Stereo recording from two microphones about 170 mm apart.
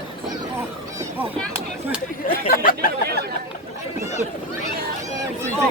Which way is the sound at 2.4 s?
60° left (ahead or behind).